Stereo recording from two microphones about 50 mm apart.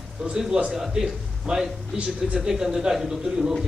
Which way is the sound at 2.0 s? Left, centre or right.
Right.